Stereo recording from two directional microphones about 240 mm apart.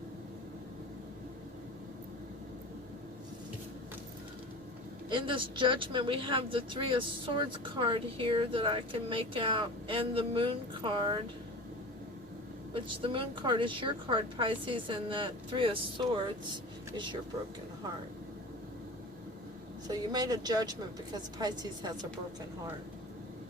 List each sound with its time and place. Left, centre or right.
5.0 s speech: right
12.7 s speech: right
19.9 s a woman's voice: centre